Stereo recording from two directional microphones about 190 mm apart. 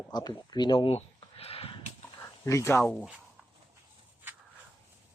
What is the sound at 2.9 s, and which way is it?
Speech, centre (ahead or behind).